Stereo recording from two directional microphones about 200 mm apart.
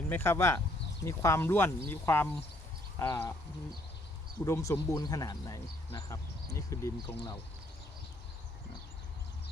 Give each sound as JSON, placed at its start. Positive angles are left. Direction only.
{"t": 0.1, "sound": "speech", "side_deg": 10}
{"t": 4.4, "sound": "speech", "side_deg": 15}